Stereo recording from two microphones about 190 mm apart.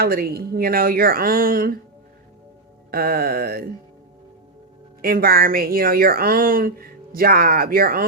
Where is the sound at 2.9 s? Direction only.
55° right (ahead or behind).